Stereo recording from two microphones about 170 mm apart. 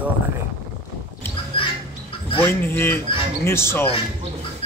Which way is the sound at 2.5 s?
15° left (ahead or behind).